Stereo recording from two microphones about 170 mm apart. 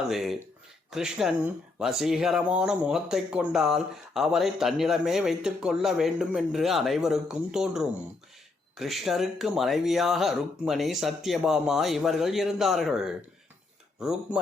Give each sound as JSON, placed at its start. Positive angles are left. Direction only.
{"t": 0.1, "sound": "speech", "side_deg": 0}